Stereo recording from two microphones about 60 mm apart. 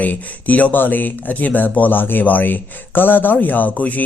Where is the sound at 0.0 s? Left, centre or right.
Left.